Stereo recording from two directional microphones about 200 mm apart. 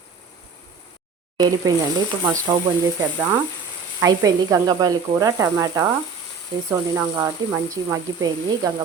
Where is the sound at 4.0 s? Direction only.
15° right (ahead or behind).